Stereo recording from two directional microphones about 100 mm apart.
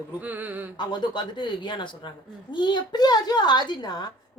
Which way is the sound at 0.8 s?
50° left (ahead or behind).